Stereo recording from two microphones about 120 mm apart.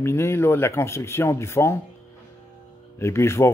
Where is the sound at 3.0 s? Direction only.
20° left (ahead or behind).